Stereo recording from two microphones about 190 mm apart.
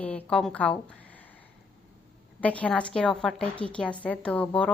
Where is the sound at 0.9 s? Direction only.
5° left (ahead or behind).